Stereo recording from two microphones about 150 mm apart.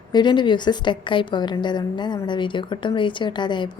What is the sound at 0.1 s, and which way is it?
A woman's voice, 30° left (ahead or behind).